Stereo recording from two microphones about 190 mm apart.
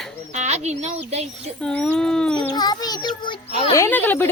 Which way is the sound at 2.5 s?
20° left (ahead or behind).